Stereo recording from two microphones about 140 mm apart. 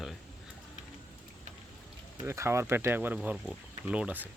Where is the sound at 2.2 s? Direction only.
20° right (ahead or behind).